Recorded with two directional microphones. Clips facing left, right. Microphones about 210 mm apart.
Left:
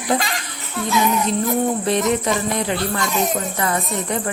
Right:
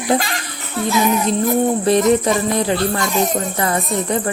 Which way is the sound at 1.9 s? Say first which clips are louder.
Right 5 dB; 35° right (ahead or behind).